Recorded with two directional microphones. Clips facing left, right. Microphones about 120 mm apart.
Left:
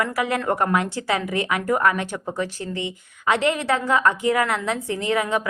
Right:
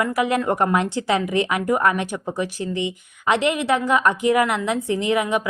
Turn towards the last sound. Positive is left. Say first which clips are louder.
# right 2 dB
turn(degrees=-15)  # may be behind; listen again after turning